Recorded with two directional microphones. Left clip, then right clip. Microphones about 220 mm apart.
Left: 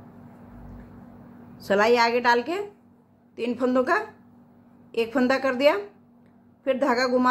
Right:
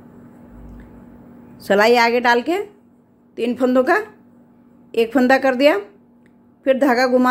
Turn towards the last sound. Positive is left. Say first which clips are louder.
# right 7 dB
turn(degrees=-25)  # may be behind; listen again after turning